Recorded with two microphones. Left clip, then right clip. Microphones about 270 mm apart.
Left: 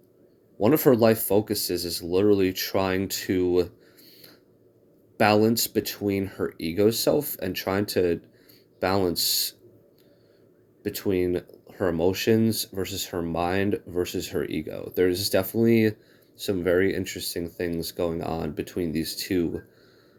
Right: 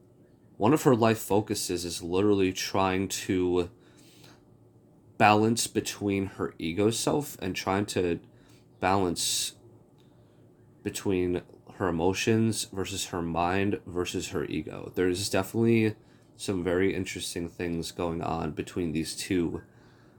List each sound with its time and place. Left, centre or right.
0.6 s speech: centre
10.8 s speech: centre